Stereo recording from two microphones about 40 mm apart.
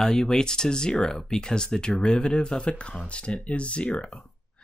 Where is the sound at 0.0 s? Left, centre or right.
Centre.